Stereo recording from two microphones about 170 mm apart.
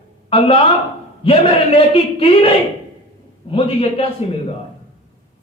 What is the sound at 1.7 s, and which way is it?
Speech, 35° left (ahead or behind).